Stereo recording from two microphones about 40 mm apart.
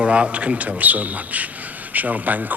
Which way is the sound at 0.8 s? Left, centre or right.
Right.